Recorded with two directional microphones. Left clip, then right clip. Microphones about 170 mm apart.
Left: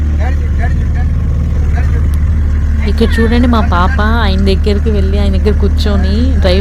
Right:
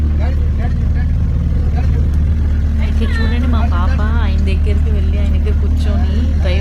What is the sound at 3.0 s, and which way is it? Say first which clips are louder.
Speech: left 11 dB; 80° left.